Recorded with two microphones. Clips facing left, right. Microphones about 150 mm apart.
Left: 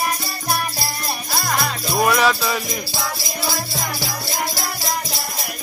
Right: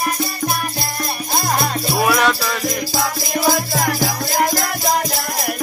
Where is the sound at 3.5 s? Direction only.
90° right.